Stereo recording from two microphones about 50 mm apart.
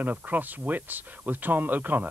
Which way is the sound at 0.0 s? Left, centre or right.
Right.